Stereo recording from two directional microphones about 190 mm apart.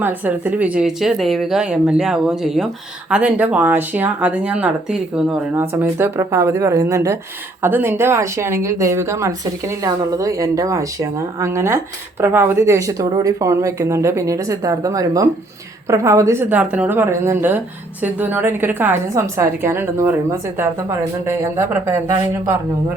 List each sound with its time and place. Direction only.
0.0 s speech: 10° right (ahead or behind)